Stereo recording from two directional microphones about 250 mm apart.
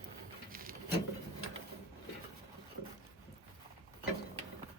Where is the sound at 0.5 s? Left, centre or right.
Right.